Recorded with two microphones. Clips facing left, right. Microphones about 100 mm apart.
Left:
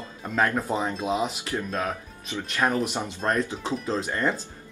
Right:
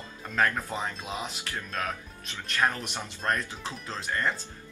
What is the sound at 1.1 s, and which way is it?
Speech, 10° left (ahead or behind).